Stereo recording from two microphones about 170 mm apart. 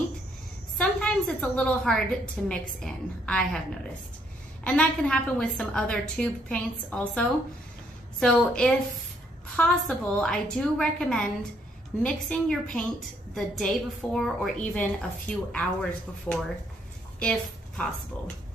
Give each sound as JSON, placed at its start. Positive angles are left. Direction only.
{"t": 0.7, "sound": "a sound", "side_deg": 5}
{"t": 1.6, "sound": "a woman's voice", "side_deg": 5}
{"t": 4.6, "sound": "a woman's voice", "side_deg": 5}